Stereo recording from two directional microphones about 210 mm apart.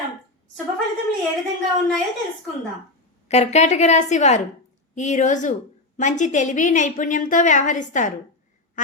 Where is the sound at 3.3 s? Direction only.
30° left (ahead or behind).